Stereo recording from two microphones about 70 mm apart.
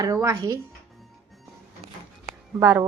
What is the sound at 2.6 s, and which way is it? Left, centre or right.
Speech, right.